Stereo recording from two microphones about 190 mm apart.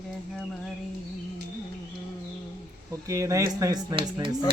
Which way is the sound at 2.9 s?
15° right (ahead or behind).